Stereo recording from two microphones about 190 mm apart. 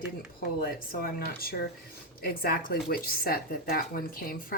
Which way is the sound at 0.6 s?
50° left (ahead or behind).